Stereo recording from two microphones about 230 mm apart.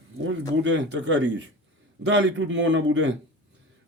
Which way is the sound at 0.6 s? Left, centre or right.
Right.